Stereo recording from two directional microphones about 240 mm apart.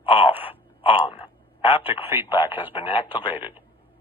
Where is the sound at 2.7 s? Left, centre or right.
Left.